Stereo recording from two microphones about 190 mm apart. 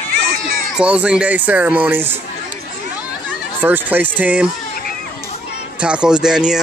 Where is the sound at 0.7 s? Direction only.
5° right (ahead or behind).